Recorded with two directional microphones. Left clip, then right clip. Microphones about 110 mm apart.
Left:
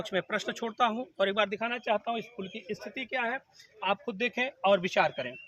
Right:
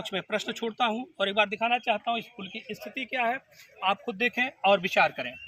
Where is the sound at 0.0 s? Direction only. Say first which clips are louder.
Even; 40° left (ahead or behind).